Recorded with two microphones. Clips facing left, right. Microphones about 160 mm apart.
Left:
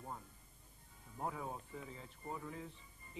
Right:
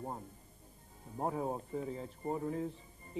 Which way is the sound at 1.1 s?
40° right (ahead or behind).